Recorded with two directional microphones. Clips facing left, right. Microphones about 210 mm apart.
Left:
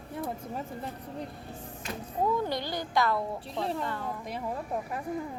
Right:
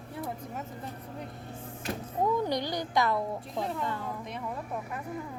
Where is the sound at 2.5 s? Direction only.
15° right (ahead or behind).